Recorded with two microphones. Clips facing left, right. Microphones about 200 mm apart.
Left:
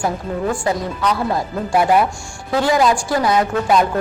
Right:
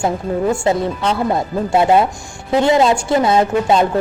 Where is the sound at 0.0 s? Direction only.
25° right (ahead or behind).